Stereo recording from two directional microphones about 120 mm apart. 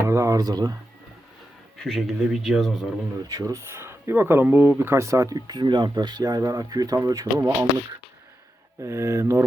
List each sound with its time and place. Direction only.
0.0 s speech: 25° right (ahead or behind)
1.8 s speech: centre (ahead or behind)
3.2 s speech: 30° right (ahead or behind)
8.8 s speech: 25° right (ahead or behind)